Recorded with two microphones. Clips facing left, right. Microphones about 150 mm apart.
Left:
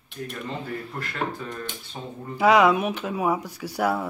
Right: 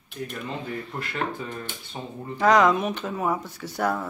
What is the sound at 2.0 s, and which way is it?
Speech, 15° right (ahead or behind).